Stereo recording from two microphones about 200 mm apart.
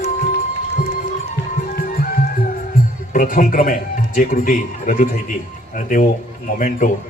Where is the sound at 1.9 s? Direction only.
45° left (ahead or behind).